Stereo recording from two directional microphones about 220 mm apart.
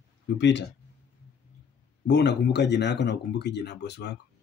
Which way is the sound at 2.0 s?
50° left (ahead or behind).